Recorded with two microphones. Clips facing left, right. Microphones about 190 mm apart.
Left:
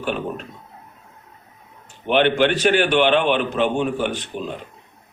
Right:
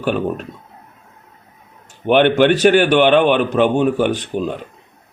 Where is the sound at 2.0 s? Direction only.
50° right (ahead or behind).